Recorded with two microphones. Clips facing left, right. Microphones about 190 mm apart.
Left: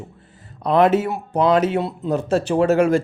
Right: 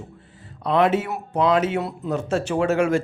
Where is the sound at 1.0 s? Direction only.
30° left (ahead or behind).